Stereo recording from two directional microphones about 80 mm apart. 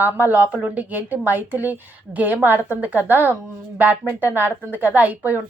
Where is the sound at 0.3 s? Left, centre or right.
Centre.